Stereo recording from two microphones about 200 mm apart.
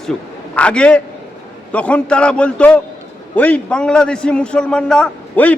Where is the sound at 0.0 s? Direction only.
5° left (ahead or behind).